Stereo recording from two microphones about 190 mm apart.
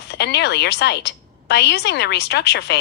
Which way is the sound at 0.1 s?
60° left (ahead or behind).